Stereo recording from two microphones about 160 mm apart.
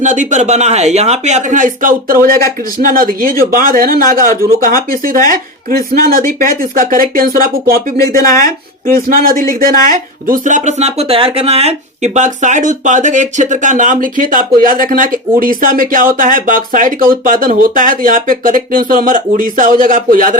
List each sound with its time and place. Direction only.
0.0 s speech: 50° right (ahead or behind)
9.0 s speech: 65° right (ahead or behind)